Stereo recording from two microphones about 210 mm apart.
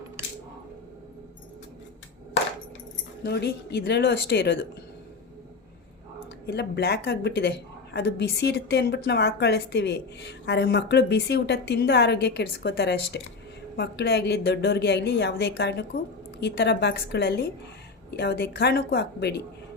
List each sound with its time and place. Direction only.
3.2 s a woman's voice: 50° left (ahead or behind)
6.4 s a woman's voice: 50° left (ahead or behind)